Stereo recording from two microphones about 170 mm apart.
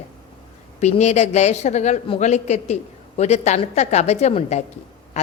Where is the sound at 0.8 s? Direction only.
40° left (ahead or behind).